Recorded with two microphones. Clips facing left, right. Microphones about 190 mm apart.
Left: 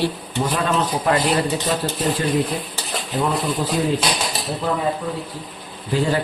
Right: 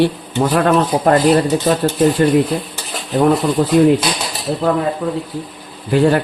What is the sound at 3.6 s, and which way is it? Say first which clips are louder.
Speech: right 8 dB; 65° right (ahead or behind).